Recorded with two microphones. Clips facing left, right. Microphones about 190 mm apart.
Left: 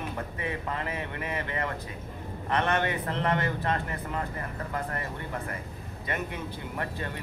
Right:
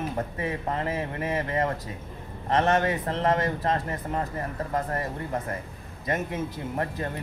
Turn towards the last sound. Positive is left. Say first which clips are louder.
# right 4 dB
turn(degrees=-40)  # may be behind; listen again after turning